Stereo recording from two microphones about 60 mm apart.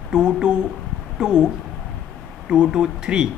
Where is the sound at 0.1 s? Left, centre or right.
Centre.